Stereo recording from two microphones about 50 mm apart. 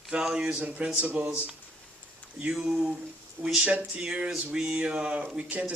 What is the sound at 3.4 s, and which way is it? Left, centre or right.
Speech, right.